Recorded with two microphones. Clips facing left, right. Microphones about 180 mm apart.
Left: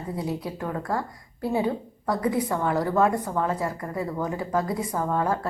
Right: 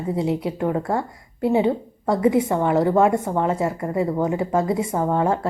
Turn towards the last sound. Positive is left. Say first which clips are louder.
# right 5 dB
turn(degrees=-25)  # may be behind; listen again after turning